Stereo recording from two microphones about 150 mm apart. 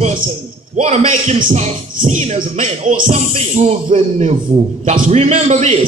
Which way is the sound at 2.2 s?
50° right (ahead or behind).